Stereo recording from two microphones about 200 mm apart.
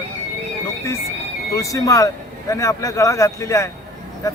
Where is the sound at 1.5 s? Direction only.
15° left (ahead or behind).